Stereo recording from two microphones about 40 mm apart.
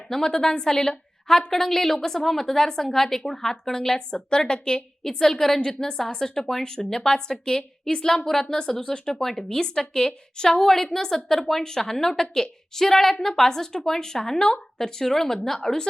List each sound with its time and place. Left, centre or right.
0.1 s a woman's voice: centre
5.0 s a woman's voice: centre